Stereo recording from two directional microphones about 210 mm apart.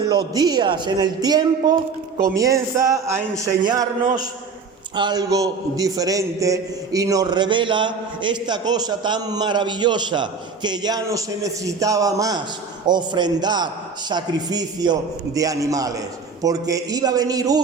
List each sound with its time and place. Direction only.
0.1 s a man's voice: 20° right (ahead or behind)
4.9 s a man's voice: 20° right (ahead or behind)